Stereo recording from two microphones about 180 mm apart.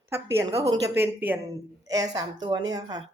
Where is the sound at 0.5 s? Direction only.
35° right (ahead or behind).